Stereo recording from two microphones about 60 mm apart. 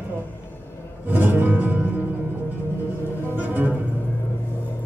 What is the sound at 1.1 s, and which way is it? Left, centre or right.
Music, right.